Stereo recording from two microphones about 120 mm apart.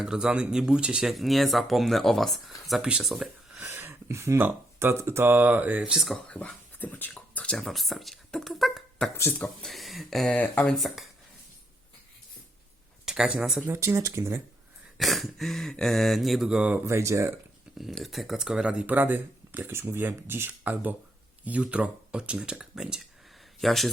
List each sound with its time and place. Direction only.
0.0 s speech: 5° right (ahead or behind)
3.7 s speech: 20° right (ahead or behind); by 10.3 s centre (ahead or behind)
10.3 s speech: 10° left (ahead or behind)
13.1 s speech: 5° right (ahead or behind)
13.7 s speech: 25° right (ahead or behind)
14.9 s speech: centre (ahead or behind)
16.8 s speech: 25° right (ahead or behind)
17.7 s speech: centre (ahead or behind)